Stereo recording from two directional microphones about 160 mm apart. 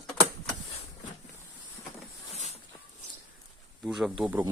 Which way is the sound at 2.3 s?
45° left (ahead or behind).